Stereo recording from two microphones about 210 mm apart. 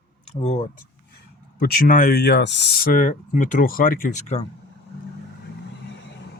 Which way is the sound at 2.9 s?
35° left (ahead or behind).